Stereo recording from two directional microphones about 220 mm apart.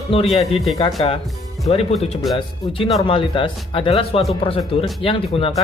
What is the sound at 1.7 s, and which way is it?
Speech, 30° left (ahead or behind).